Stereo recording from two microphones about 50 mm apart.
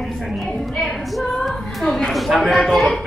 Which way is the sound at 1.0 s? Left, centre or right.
Centre.